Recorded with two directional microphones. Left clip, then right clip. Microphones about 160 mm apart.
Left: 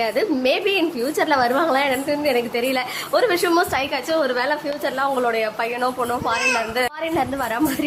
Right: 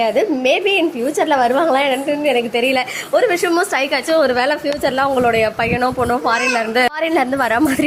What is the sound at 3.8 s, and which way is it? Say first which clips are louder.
A woman's voice: right 6 dB; 25° right (ahead or behind).